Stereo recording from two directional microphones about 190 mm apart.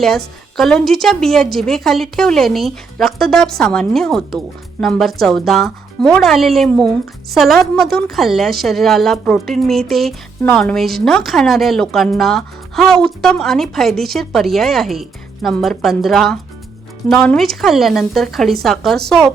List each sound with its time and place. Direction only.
0.5 s a woman's voice: centre (ahead or behind)